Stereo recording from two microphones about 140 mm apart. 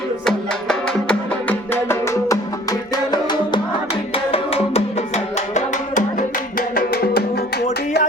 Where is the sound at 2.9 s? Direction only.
30° left (ahead or behind).